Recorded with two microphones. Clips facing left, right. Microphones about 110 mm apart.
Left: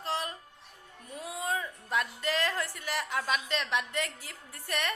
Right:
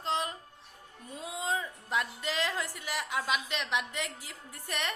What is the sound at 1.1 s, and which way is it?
A woman's voice, 20° right (ahead or behind).